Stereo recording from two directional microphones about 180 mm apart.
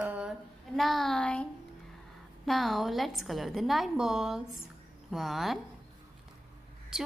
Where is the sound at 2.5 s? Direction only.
Centre (ahead or behind).